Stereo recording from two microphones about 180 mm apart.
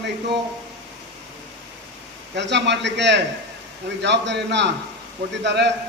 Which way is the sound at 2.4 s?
75° right (ahead or behind).